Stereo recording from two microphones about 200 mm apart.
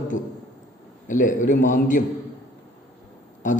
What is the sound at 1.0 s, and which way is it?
A man's voice, 40° left (ahead or behind).